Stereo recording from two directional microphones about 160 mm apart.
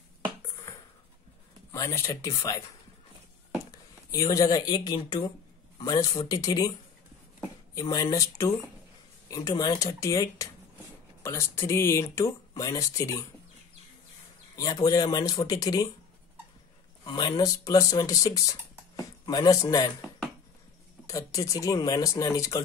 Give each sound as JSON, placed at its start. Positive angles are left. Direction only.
{"t": 1.7, "sound": "speech", "side_deg": 20}
{"t": 3.7, "sound": "speech", "side_deg": 20}
{"t": 7.7, "sound": "speech", "side_deg": 20}
{"t": 14.5, "sound": "speech", "side_deg": 20}
{"t": 17.0, "sound": "speech", "side_deg": 25}
{"t": 21.1, "sound": "speech", "side_deg": 20}